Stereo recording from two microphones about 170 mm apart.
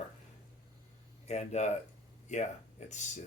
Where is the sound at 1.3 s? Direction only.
40° left (ahead or behind).